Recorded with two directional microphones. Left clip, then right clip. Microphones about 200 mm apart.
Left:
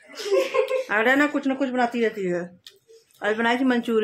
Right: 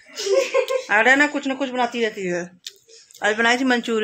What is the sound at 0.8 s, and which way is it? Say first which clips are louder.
Speech: right 7 dB; centre (ahead or behind).